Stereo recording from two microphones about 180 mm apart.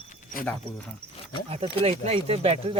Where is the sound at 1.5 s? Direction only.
35° right (ahead or behind).